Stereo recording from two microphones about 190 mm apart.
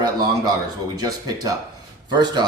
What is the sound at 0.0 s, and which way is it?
Speech, 20° right (ahead or behind).